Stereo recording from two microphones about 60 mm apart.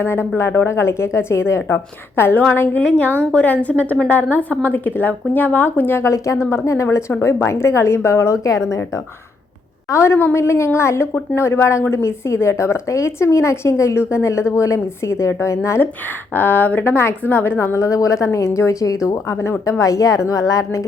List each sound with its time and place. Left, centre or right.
0.0 s a woman's voice: left
6.0 s a woman's voice: left
6.4 s a woman's voice: left
9.9 s a woman's voice: left
16.3 s a woman's voice: left
17.6 s a woman's voice: left
19.0 s a woman's voice: left
19.8 s a woman's voice: left